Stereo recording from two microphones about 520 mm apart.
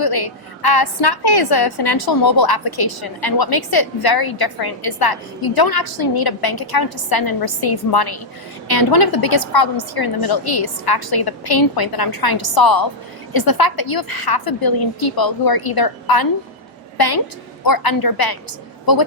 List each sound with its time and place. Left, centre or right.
0.0 s a woman's voice: left
17.6 s a woman's voice: left